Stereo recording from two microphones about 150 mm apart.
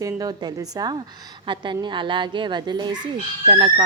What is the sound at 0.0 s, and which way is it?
A woman's voice, 25° right (ahead or behind).